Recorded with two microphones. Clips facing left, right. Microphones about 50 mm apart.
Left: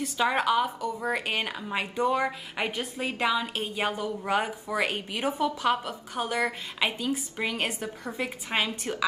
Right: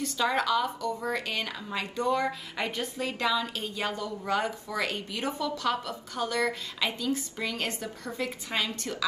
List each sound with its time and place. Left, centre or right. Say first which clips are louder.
0.0 s speech: left 2 dB; left